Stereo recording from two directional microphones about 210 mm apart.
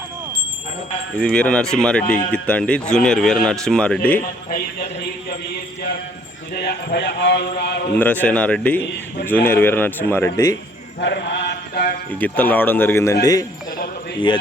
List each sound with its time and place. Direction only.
1.2 s a man's voice: 5° left (ahead or behind)
6.6 s speech: 50° left (ahead or behind)
7.9 s a man's voice: 10° left (ahead or behind)
11.0 s mantra: 55° left (ahead or behind)
12.2 s a man's voice: 10° left (ahead or behind)